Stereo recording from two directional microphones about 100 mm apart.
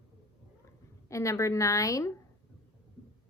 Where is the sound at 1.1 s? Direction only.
30° left (ahead or behind).